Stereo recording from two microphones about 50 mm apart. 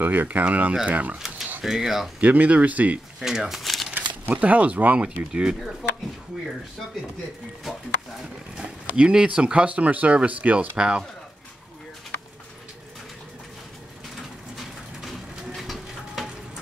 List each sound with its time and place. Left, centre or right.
0.0 s speech: right
1.1 s pigeon: centre
1.6 s speech: centre
2.1 s speech: right
3.2 s shuffling cards: centre
3.9 s speech: right
5.0 s speech: centre
8.9 s speech: centre
10.8 s speech: centre
15.0 s a sound: centre